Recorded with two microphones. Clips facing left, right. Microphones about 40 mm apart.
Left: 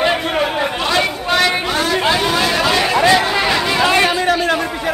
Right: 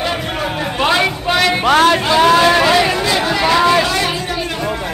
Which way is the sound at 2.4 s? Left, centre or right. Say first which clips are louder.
Right 5 dB; centre.